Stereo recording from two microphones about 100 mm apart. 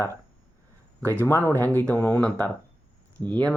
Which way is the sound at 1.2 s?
25° left (ahead or behind).